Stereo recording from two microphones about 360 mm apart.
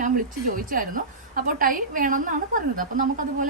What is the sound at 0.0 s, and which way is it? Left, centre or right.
A woman's voice, right.